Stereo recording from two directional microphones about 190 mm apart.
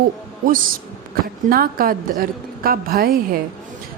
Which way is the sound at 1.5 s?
50° right (ahead or behind).